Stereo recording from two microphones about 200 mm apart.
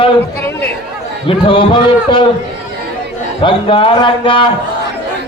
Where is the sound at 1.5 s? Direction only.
25° left (ahead or behind).